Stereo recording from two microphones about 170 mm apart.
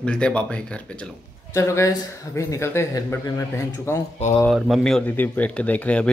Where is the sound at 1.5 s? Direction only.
15° left (ahead or behind).